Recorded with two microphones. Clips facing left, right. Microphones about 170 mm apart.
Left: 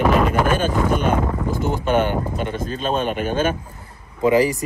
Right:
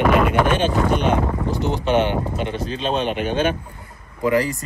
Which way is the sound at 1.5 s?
45° left (ahead or behind).